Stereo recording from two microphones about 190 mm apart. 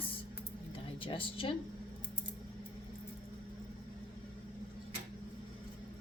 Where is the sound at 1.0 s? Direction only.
25° left (ahead or behind).